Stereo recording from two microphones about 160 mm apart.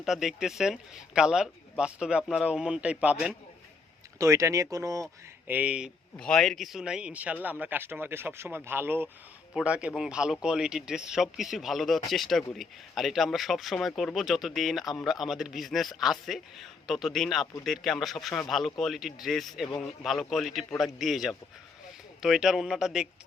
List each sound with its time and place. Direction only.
0.0 s speech: centre (ahead or behind)
4.2 s speech: 20° right (ahead or behind)
5.5 s speech: 10° right (ahead or behind)
6.1 s speech: 5° left (ahead or behind)